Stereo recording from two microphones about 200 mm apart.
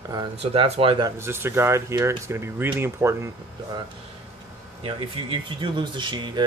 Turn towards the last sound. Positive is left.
turn(degrees=-25)  # may be behind; listen again after turning